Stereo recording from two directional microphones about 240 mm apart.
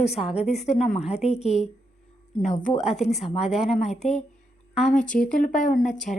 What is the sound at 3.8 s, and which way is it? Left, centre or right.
A woman's voice, left.